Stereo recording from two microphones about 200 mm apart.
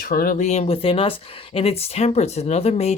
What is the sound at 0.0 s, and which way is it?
Speech, 45° left (ahead or behind).